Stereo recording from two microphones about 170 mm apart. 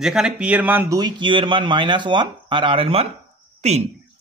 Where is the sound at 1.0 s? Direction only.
25° right (ahead or behind).